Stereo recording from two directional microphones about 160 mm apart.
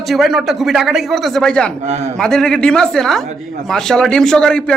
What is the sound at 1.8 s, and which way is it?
Speech, 45° right (ahead or behind).